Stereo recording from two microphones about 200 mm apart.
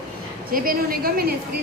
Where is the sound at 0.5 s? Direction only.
45° right (ahead or behind).